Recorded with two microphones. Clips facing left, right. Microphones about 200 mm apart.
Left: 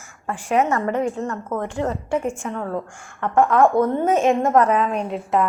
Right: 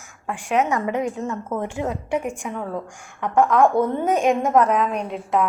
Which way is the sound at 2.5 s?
Centre (ahead or behind).